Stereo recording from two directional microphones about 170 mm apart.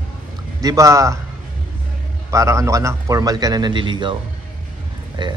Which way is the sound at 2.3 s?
20° right (ahead or behind).